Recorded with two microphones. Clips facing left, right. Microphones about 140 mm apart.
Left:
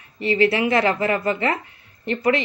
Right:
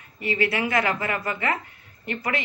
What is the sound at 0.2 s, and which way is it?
A woman's voice, 25° left (ahead or behind).